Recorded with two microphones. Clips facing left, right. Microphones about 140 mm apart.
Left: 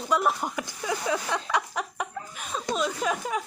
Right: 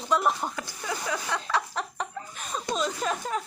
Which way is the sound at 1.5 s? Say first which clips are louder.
Left 1 dB; 10° left (ahead or behind).